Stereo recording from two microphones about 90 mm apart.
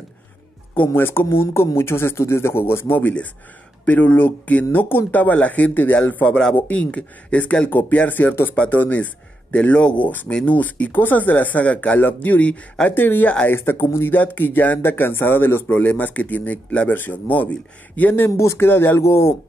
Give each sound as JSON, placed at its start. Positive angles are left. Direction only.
{"t": 0.7, "sound": "speech", "side_deg": 25}